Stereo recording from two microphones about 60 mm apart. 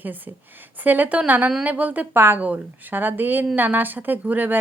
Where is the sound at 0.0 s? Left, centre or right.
Right.